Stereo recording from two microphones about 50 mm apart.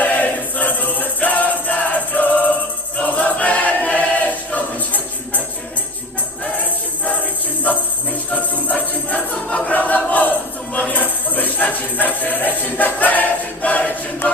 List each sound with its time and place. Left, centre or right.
0.0 s music: left
3.0 s choir: left
6.4 s music: left
8.3 s music: left